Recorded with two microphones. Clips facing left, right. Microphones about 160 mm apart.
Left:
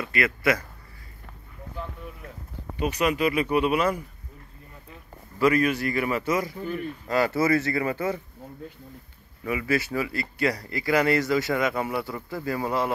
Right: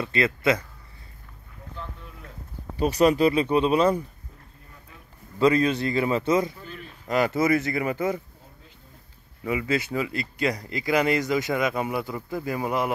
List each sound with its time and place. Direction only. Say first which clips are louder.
0.0 s speech: right 2 dB; 25° right (ahead or behind)
2.8 s speech: right 5 dB; 35° right (ahead or behind)
5.4 s speech: right 1 dB; 25° right (ahead or behind)
6.6 s speech: left 10 dB; 55° left (ahead or behind)
7.1 s speech: right 1 dB; 20° right (ahead or behind)
9.5 s speech: even; 20° right (ahead or behind)